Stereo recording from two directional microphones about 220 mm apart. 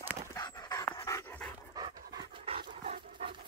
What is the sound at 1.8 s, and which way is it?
Dog, 15° right (ahead or behind).